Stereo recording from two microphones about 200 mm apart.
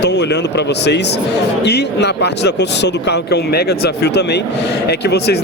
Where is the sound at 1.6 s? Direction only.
60° left (ahead or behind).